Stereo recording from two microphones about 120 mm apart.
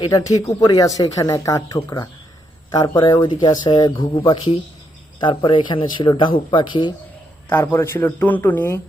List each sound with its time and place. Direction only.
0.0 s speech: 30° left (ahead or behind)
7.5 s a man's voice: 20° left (ahead or behind)